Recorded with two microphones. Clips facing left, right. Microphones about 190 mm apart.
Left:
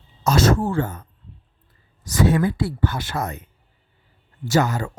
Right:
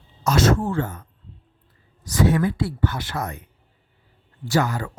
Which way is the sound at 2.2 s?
30° left (ahead or behind).